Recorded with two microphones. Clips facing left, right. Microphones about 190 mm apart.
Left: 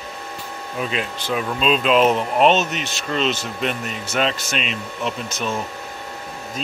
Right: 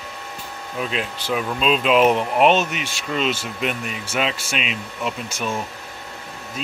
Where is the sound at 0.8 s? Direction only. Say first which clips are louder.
Left 1 dB; centre (ahead or behind).